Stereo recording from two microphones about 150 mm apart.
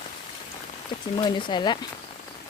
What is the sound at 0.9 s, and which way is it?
Speech, 30° left (ahead or behind).